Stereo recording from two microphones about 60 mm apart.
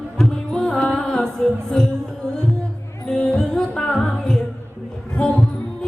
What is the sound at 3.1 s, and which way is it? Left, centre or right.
Music, centre.